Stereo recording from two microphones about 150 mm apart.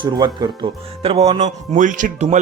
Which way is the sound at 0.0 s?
30° right (ahead or behind).